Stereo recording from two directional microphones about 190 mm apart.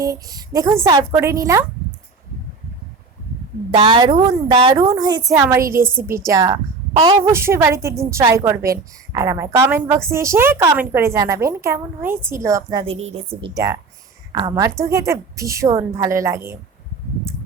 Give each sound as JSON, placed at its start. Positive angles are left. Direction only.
{"t": 0.0, "sound": "a woman's voice", "side_deg": -20}
{"t": 3.7, "sound": "a woman's voice", "side_deg": -25}
{"t": 7.2, "sound": "a woman's voice", "side_deg": -15}
{"t": 12.8, "sound": "a woman's voice", "side_deg": -35}
{"t": 13.5, "sound": "a woman's voice", "side_deg": -15}